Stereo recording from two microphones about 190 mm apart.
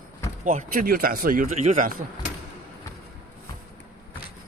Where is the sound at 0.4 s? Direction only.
45° right (ahead or behind).